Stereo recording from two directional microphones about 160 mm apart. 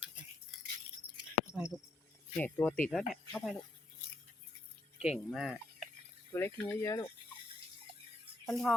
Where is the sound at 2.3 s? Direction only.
10° left (ahead or behind).